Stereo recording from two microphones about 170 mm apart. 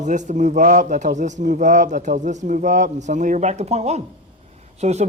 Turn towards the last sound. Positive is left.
turn(degrees=-40)  # may be behind; listen again after turning